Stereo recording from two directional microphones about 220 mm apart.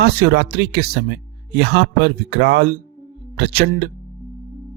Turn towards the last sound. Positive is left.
turn(degrees=-45)  # may be behind; listen again after turning